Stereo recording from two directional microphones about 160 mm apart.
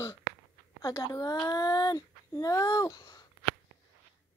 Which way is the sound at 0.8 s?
20° left (ahead or behind).